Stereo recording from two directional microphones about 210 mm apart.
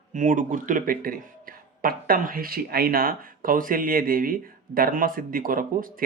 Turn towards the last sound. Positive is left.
turn(degrees=-40)  # may be behind; listen again after turning